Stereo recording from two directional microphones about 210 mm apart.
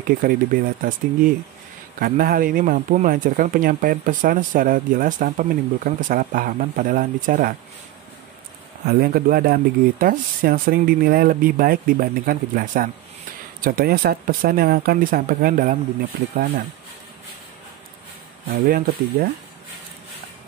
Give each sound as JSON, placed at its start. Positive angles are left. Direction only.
{"t": 0.2, "sound": "speech", "side_deg": -40}
{"t": 8.8, "sound": "speech", "side_deg": -45}
{"t": 18.5, "sound": "speech", "side_deg": -45}